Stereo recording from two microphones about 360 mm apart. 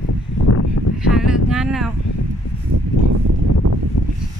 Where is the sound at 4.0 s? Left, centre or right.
Left.